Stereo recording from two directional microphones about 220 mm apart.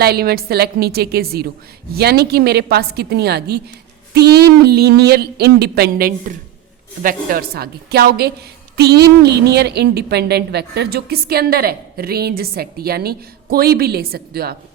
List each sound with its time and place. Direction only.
0.0 s a woman's voice: 45° right (ahead or behind)